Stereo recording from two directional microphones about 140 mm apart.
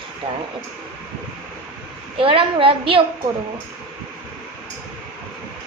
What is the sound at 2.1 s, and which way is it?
Speech, 40° right (ahead or behind).